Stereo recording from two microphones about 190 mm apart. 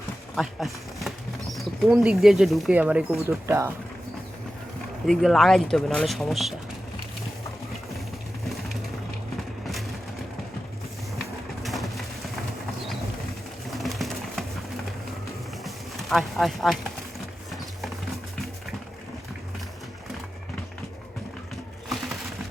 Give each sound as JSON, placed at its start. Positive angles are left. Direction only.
{"t": 0.3, "sound": "speech", "side_deg": 0}
{"t": 5.0, "sound": "speech", "side_deg": 0}
{"t": 11.6, "sound": "pigeon", "side_deg": 0}
{"t": 13.7, "sound": "pigeon", "side_deg": 0}
{"t": 15.6, "sound": "a sound", "side_deg": 0}